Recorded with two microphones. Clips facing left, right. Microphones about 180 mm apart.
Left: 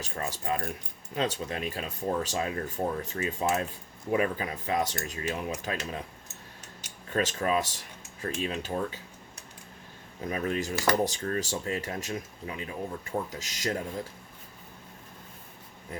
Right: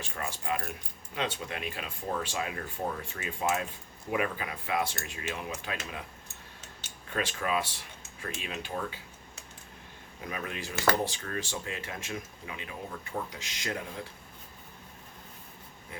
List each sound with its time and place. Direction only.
0.0 s speech: 40° left (ahead or behind)
7.1 s speech: 40° left (ahead or behind)
10.2 s speech: 40° left (ahead or behind)